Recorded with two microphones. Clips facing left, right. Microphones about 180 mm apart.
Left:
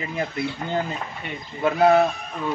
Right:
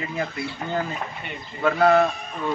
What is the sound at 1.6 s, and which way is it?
Speech, 15° left (ahead or behind).